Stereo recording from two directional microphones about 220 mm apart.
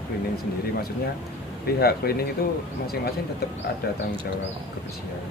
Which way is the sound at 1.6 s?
45° left (ahead or behind).